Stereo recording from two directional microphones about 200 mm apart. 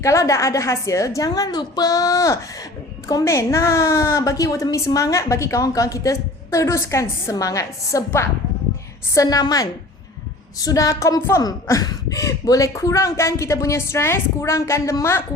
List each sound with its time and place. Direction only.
0.0 s a woman's voice: 15° left (ahead or behind)